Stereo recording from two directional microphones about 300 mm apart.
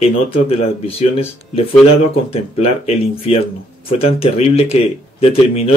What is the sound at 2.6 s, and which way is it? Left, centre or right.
Speech, left.